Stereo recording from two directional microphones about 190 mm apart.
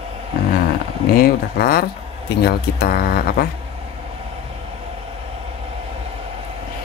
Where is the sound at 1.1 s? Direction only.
50° left (ahead or behind).